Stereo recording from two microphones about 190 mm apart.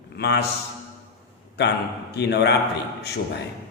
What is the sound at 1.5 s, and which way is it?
A man's voice, 60° left (ahead or behind).